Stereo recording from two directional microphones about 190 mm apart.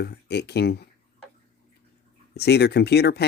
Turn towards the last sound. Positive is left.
turn(degrees=60)  # may be behind; listen again after turning